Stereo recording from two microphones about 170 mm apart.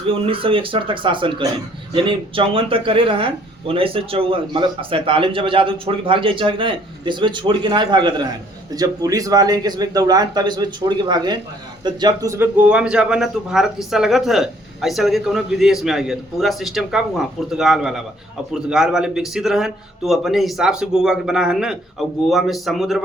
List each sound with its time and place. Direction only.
0.1 s a man's voice: 30° right (ahead or behind); by 23.0 s centre (ahead or behind)